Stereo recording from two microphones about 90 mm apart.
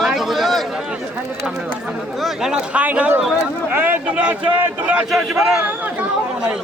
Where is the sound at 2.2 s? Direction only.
5° right (ahead or behind).